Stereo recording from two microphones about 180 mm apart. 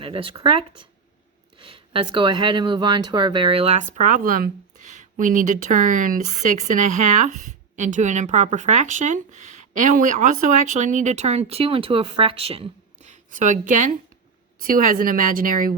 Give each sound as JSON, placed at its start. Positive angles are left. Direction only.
{"t": 0.0, "sound": "speech", "side_deg": -30}